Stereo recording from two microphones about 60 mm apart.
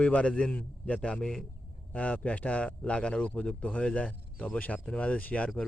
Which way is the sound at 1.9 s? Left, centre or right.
Left.